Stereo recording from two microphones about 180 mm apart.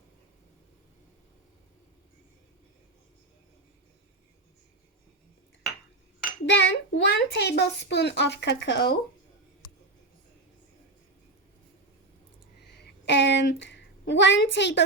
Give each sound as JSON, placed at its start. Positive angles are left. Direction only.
{"t": 6.4, "sound": "a child's voice", "side_deg": 80}
{"t": 12.8, "sound": "a woman's voice", "side_deg": 75}